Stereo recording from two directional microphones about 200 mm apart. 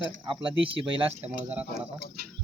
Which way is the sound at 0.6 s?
30° right (ahead or behind).